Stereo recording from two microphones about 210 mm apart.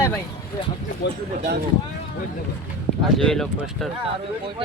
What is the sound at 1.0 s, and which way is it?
Speech, 55° left (ahead or behind).